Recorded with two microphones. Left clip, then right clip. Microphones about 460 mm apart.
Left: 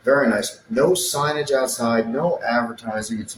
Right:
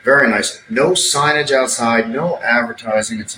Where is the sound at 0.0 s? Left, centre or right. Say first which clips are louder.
Right 6 dB; left.